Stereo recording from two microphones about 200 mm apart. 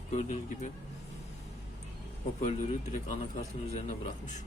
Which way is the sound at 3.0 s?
35° left (ahead or behind).